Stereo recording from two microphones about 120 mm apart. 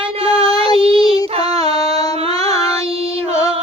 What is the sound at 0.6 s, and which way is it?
Child singing, 50° right (ahead or behind).